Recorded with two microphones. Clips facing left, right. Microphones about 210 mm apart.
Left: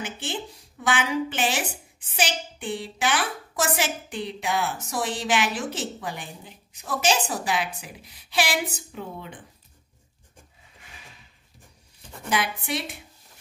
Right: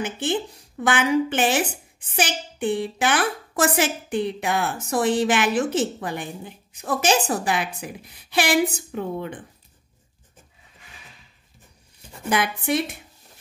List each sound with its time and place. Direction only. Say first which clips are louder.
0.0 s a woman's voice: right 7 dB; 55° right (ahead or behind)
12.3 s a woman's voice: right 5 dB; 50° right (ahead or behind)